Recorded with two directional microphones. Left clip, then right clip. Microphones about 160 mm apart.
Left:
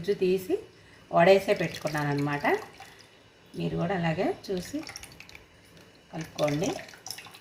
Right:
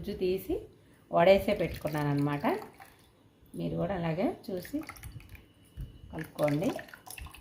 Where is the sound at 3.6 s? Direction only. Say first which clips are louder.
Left 3 dB; 35° right (ahead or behind).